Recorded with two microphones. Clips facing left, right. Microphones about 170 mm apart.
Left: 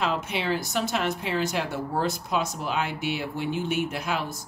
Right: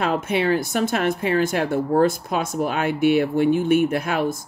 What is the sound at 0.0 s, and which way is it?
Speech, 50° right (ahead or behind).